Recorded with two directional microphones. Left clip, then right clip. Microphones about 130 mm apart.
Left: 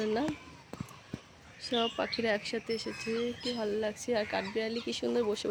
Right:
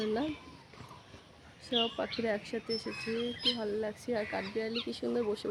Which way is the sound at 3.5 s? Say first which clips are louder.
Left 2 dB; 30° left (ahead or behind).